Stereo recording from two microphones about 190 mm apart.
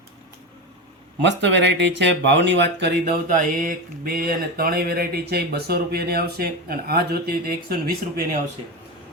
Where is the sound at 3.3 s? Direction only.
45° right (ahead or behind).